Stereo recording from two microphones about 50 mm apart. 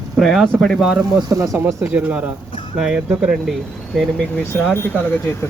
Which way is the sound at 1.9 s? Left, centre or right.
Right.